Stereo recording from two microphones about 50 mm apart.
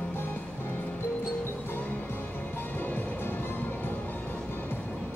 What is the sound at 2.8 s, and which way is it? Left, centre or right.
Music, left.